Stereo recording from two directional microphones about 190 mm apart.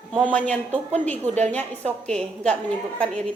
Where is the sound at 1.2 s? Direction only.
35° right (ahead or behind).